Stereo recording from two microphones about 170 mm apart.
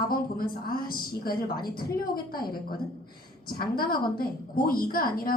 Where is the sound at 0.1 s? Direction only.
60° left (ahead or behind).